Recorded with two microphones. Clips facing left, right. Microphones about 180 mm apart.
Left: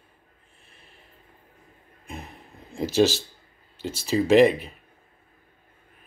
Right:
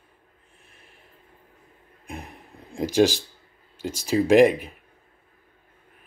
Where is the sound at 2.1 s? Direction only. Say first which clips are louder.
Right 1 dB; 15° right (ahead or behind).